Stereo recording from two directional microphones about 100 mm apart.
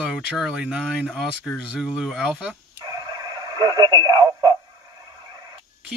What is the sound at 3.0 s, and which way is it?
Radio, 40° right (ahead or behind).